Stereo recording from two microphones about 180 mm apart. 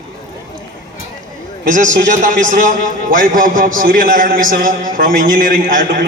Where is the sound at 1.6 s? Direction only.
45° right (ahead or behind).